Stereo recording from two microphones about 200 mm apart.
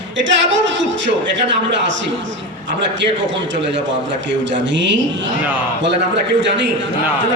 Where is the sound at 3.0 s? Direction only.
65° right (ahead or behind).